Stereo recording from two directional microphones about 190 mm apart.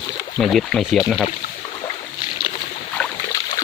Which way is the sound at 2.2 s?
25° left (ahead or behind).